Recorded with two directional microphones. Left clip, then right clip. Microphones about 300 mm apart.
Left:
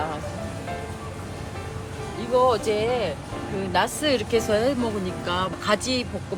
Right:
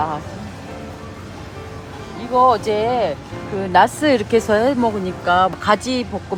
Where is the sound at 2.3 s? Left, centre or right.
Right.